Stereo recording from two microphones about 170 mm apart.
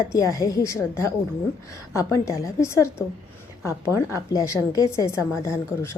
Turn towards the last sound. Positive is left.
turn(degrees=15)  # may be behind; listen again after turning